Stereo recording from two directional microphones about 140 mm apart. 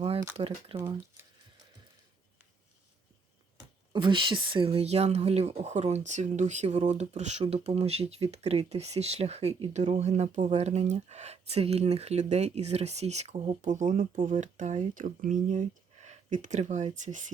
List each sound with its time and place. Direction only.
0.3 s speech: 45° right (ahead or behind)
0.8 s speech: 20° right (ahead or behind)
3.9 s speech: 35° right (ahead or behind)
13.6 s speech: 60° right (ahead or behind)